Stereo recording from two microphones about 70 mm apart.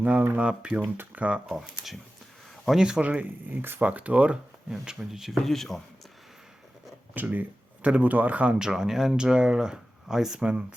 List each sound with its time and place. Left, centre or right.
0.0 s speech: right
1.5 s speech: centre
3.0 s speech: right
4.7 s speech: centre
7.1 s speech: right